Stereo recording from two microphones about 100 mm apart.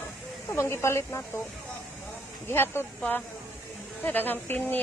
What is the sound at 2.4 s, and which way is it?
Speech, 25° left (ahead or behind).